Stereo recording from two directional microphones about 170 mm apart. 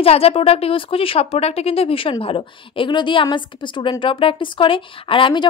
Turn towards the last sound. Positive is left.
turn(degrees=30)  # may be behind; listen again after turning